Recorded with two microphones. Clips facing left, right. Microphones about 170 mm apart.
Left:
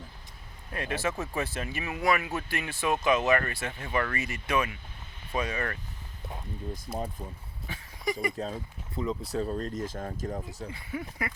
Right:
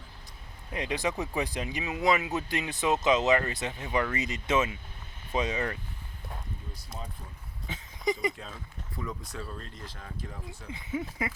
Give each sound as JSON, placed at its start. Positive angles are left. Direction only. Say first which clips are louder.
{"t": 0.7, "sound": "speech", "louder": "right 1 dB", "side_deg": -15}
{"t": 7.7, "sound": "a sound", "louder": "right 2 dB", "side_deg": -20}
{"t": 8.4, "sound": "speech", "louder": "left 9 dB", "side_deg": 40}
{"t": 10.7, "sound": "speech", "louder": "right 6 dB", "side_deg": -20}